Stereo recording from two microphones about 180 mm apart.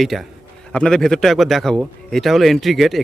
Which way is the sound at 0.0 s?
Centre (ahead or behind).